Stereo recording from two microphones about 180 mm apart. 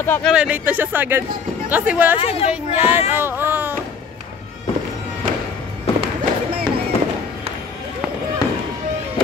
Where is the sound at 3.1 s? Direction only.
10° right (ahead or behind).